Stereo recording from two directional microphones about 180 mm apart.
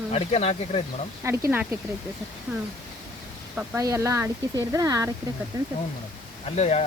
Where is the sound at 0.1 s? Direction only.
35° left (ahead or behind).